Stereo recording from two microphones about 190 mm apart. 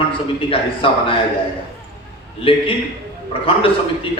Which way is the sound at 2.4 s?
30° left (ahead or behind).